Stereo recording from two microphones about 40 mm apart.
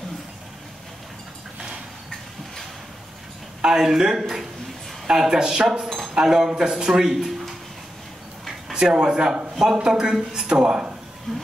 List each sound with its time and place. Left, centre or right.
3.6 s speech: centre
8.7 s speech: centre
11.3 s a sound: centre